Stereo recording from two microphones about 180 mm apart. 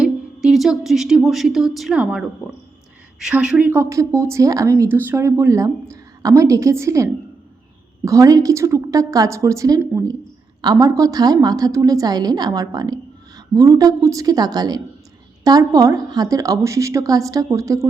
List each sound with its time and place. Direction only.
0.0 s a woman's voice: centre (ahead or behind); by 17.8 s 15° right (ahead or behind)